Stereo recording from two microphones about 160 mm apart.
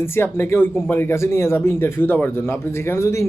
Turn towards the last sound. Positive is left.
turn(degrees=15)  # may be behind; listen again after turning